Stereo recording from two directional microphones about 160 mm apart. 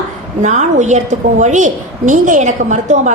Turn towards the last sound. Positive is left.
turn(degrees=-50)  # may be behind; listen again after turning